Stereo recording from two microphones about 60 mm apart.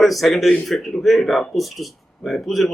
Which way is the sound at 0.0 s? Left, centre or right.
Centre.